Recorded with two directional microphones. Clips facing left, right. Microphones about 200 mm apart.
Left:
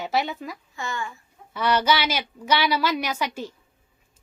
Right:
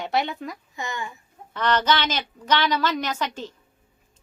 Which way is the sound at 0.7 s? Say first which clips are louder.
Left 2 dB; 20° right (ahead or behind).